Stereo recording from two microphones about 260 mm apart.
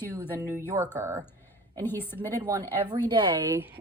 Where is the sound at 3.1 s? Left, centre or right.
Centre.